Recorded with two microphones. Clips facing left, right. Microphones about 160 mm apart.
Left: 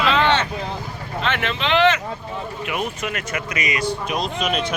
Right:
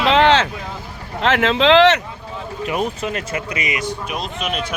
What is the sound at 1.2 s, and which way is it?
Speech, 90° right.